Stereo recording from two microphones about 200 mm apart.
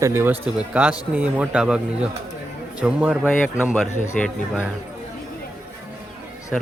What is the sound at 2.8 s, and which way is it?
Speech, 5° right (ahead or behind).